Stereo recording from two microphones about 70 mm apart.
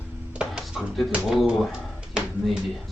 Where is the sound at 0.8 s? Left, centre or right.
Centre.